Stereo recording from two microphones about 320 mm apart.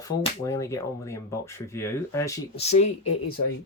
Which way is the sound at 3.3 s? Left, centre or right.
Left.